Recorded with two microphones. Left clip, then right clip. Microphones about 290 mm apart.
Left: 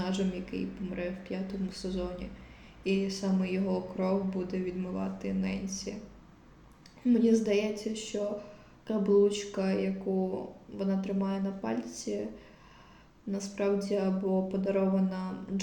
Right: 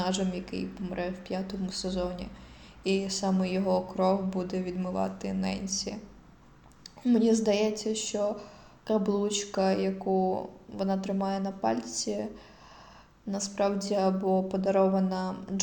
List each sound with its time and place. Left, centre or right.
0.0 s speech: right
7.0 s speech: right
13.3 s speech: right